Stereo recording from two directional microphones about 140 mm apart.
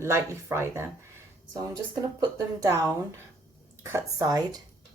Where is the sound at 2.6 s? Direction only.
20° right (ahead or behind).